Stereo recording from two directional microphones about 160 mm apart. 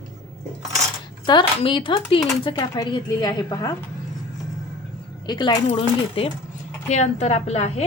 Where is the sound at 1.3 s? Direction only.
30° left (ahead or behind).